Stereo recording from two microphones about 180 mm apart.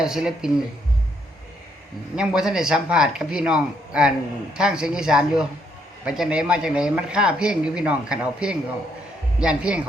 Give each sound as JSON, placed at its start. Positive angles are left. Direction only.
{"t": 0.0, "sound": "speech", "side_deg": -5}
{"t": 2.1, "sound": "speech", "side_deg": -5}